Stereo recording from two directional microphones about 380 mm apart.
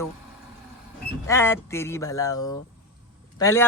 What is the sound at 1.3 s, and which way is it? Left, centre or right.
A man's voice, centre.